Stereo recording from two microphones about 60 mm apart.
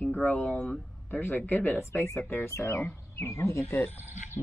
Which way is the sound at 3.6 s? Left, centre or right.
Left.